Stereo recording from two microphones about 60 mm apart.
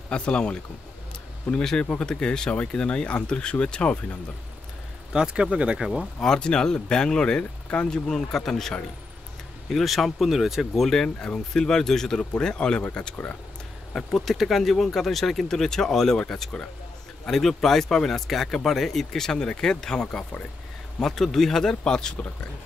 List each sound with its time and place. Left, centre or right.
0.1 s speech: centre
5.1 s speech: centre
6.1 s speech: centre
13.9 s speech: centre
21.0 s speech: centre